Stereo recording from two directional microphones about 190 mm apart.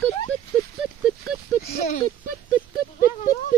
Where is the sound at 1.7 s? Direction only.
50° left (ahead or behind).